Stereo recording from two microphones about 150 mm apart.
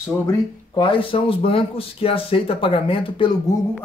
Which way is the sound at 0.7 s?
35° left (ahead or behind).